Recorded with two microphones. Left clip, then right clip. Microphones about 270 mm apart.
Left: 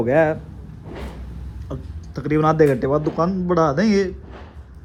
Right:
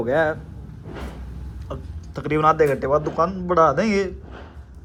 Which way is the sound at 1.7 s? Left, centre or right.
Left.